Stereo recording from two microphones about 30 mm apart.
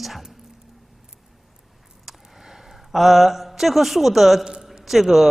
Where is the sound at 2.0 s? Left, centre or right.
Centre.